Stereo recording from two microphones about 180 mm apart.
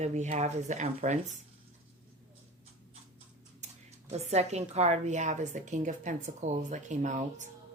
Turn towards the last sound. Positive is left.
turn(degrees=-40)  # may be behind; listen again after turning